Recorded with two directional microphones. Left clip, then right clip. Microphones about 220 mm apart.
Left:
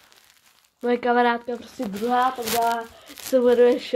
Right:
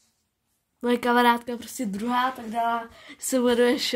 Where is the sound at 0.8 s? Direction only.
40° right (ahead or behind).